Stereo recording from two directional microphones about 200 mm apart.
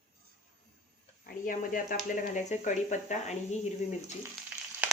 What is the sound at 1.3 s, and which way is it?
A woman's voice, 45° left (ahead or behind).